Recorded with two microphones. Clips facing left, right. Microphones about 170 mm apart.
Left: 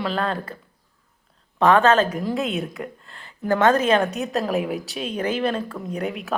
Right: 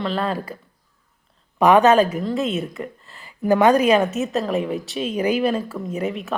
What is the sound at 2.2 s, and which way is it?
Speech, centre (ahead or behind).